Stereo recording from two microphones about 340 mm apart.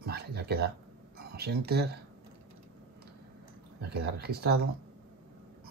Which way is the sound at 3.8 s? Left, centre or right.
Right.